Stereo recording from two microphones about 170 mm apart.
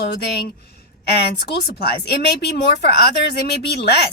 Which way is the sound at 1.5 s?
70° left (ahead or behind).